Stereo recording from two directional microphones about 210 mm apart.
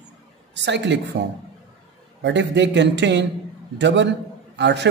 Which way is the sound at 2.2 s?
55° right (ahead or behind).